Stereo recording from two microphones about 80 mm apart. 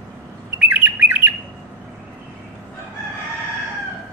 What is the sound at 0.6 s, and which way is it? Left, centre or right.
Bird, centre.